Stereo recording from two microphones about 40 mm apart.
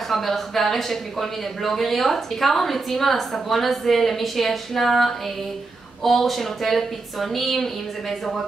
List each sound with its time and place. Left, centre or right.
0.1 s speech: centre